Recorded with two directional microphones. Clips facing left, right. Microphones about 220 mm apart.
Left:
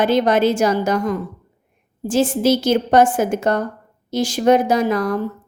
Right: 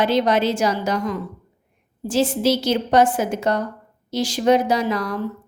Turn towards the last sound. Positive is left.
turn(degrees=50)  # may be behind; listen again after turning